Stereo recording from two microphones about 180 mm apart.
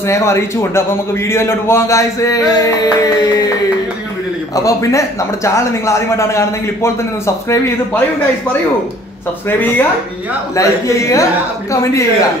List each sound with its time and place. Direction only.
0.0 s a man's voice: 15° left (ahead or behind)
4.6 s a man's voice: 15° left (ahead or behind)
9.5 s a man's voice: 10° left (ahead or behind)